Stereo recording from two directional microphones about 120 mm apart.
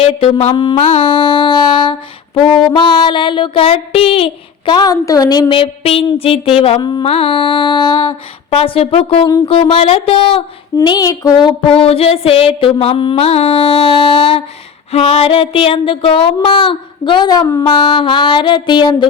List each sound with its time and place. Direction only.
0.0 s mantra: 55° left (ahead or behind)
0.5 s child singing: 35° left (ahead or behind)
5.5 s a sound: 50° left (ahead or behind)
10.8 s child singing: 35° left (ahead or behind)
11.8 s a sound: 55° left (ahead or behind); by 17.7 s 30° left (ahead or behind)
17.7 s child singing: 40° left (ahead or behind)